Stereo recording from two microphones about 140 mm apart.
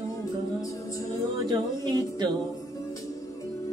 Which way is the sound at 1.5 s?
30° right (ahead or behind).